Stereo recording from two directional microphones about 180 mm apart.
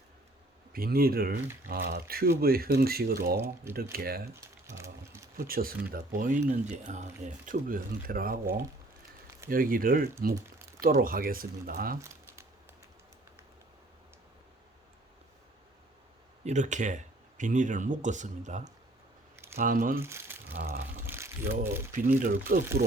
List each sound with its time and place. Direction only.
0.7 s speech: 55° right (ahead or behind)
4.6 s sewing machine: 15° right (ahead or behind)
5.4 s speech: 55° right (ahead or behind)
11.9 s crumpling: 15° right (ahead or behind)
16.4 s speech: 40° right (ahead or behind)
20.0 s speech: 15° right (ahead or behind)
20.6 s speech: 60° right (ahead or behind)
21.0 s a sound: 10° right (ahead or behind)
21.5 s speech: 10° right (ahead or behind)
21.9 s speech: 50° right (ahead or behind)